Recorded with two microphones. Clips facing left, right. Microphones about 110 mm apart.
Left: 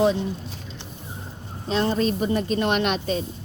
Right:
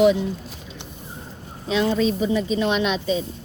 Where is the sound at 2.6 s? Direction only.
55° left (ahead or behind).